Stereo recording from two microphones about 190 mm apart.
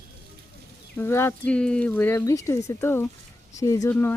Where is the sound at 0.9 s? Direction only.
15° left (ahead or behind).